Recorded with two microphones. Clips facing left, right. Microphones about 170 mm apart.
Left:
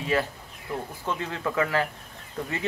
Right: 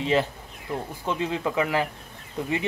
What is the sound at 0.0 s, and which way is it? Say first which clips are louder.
Speech: right 3 dB; 20° right (ahead or behind).